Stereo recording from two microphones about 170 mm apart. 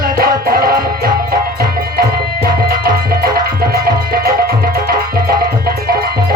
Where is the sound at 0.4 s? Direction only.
60° right (ahead or behind).